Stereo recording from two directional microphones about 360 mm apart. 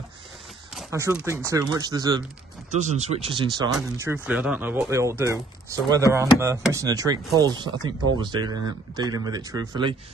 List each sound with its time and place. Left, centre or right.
0.7 s speech: centre